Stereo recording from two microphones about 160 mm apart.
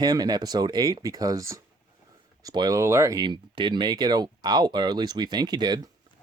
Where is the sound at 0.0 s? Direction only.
25° right (ahead or behind).